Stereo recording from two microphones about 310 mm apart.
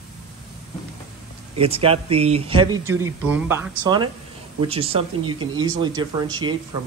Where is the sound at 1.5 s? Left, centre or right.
Centre.